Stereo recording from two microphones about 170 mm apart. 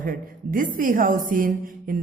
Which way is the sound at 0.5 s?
55° right (ahead or behind).